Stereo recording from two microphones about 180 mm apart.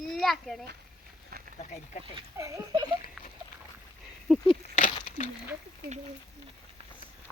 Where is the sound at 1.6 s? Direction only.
40° left (ahead or behind).